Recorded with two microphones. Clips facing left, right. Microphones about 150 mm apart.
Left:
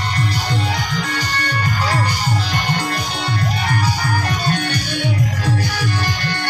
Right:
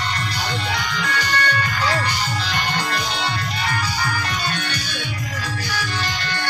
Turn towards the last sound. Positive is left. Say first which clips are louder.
# left 5 dB
turn(degrees=50)  # may be behind; listen again after turning